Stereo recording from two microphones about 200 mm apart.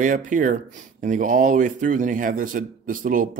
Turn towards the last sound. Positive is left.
turn(degrees=-45)  # may be behind; listen again after turning